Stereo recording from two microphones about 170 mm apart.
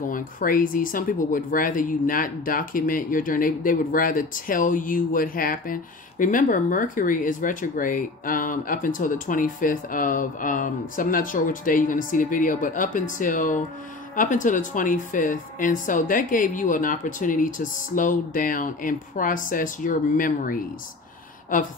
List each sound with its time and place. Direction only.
0.1 s speech: 55° left (ahead or behind)